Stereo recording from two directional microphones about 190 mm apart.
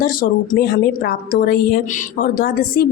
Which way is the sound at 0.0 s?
50° left (ahead or behind).